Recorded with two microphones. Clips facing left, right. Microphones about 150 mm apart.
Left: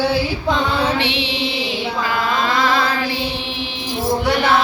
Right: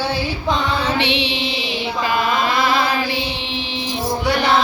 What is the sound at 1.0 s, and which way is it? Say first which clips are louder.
Music: right 1 dB; 20° right (ahead or behind).